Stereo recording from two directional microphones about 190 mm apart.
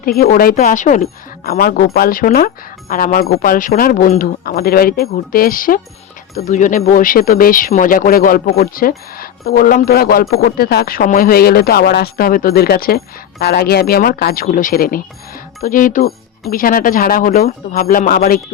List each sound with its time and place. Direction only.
0.0 s speech: 50° left (ahead or behind)